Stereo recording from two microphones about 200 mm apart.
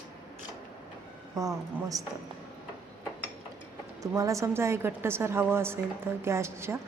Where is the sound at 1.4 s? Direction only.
15° right (ahead or behind).